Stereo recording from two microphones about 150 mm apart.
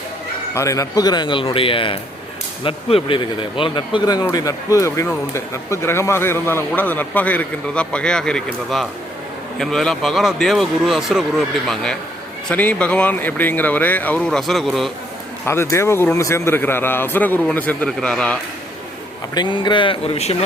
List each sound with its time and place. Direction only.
0.5 s a man's voice: 20° left (ahead or behind); by 14.9 s centre (ahead or behind)
15.4 s a man's voice: 15° left (ahead or behind)
19.3 s speech: 30° left (ahead or behind)